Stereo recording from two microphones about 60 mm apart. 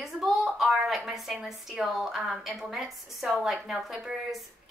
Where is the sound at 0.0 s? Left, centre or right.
Centre.